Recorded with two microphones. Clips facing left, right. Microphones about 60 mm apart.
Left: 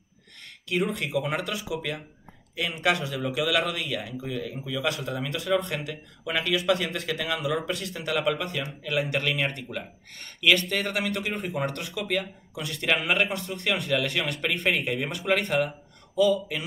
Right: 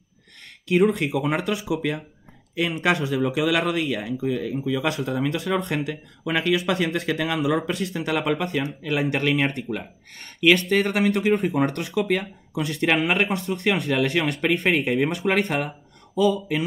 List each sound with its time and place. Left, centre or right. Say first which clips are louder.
0.9 s speech: right 4 dB; right